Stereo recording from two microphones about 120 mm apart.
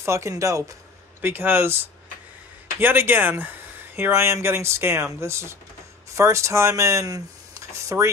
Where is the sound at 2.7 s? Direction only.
15° right (ahead or behind).